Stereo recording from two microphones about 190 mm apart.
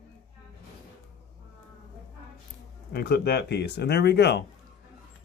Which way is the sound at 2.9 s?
55° left (ahead or behind).